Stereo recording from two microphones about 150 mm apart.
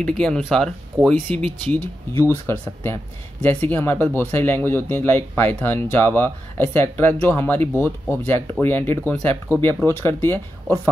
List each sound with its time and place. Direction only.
0.0 s speech: 5° left (ahead or behind)